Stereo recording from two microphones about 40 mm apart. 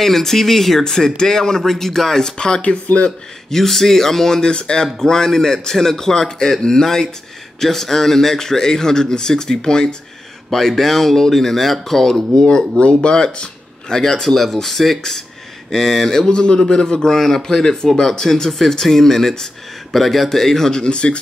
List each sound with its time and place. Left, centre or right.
0.0 s a man's voice: centre
2.6 s speech: left
3.4 s a man's voice: centre
10.5 s a man's voice: centre
16.3 s a man's voice: left